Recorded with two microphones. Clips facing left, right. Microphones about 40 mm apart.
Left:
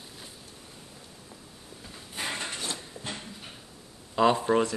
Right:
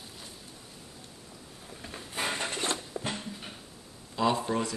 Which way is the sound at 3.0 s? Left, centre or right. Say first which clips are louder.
Right 4 dB; right.